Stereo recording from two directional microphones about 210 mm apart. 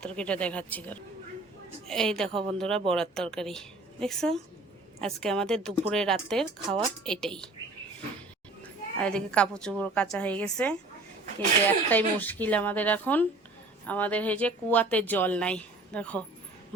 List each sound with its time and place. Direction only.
0.0 s a woman's voice: 5° left (ahead or behind)
2.3 s speech: 25° right (ahead or behind)
2.6 s a woman's voice: centre (ahead or behind)
9.0 s a woman's voice: 5° left (ahead or behind)
11.9 s speech: 10° left (ahead or behind)